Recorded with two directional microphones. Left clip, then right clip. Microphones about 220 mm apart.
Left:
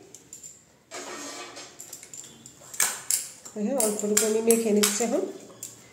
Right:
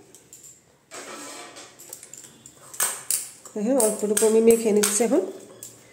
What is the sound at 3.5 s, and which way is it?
Speech, 45° right (ahead or behind).